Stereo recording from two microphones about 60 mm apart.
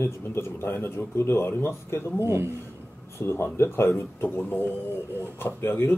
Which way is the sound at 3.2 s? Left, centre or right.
Left.